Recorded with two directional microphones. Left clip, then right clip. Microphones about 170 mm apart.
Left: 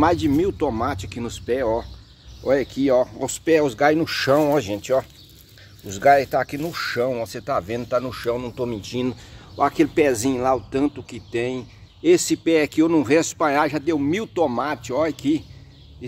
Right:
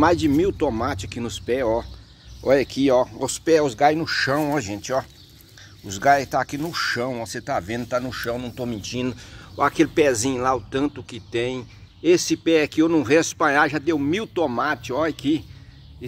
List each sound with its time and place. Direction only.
0.0 s speech: 5° right (ahead or behind); by 2.8 s 25° right (ahead or behind)
2.8 s speech: 15° right (ahead or behind)
3.2 s speech: centre (ahead or behind)
3.8 s speech: 30° left (ahead or behind)
5.9 s speech: 10° left (ahead or behind)
9.6 s speech: 10° right (ahead or behind)